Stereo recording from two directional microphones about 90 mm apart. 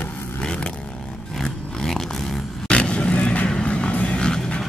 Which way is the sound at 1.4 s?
5° left (ahead or behind).